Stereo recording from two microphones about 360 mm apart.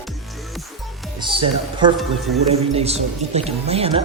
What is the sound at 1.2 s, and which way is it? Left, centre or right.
Speech, centre.